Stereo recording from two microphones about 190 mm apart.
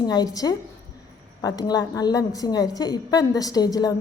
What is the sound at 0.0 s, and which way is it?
A woman's voice, 20° left (ahead or behind).